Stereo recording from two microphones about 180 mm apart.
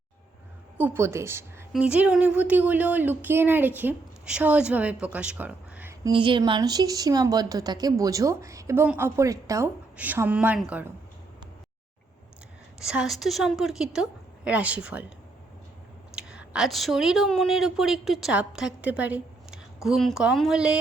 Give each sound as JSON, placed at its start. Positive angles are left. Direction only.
{"t": 0.8, "sound": "speech", "side_deg": -10}
{"t": 6.0, "sound": "speech", "side_deg": -25}
{"t": 12.8, "sound": "a woman's voice", "side_deg": -5}
{"t": 16.1, "sound": "speech", "side_deg": -5}